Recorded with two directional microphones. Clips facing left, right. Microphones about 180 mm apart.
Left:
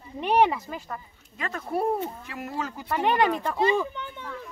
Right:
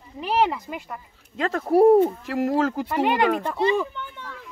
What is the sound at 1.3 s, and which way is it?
Speech, 80° right.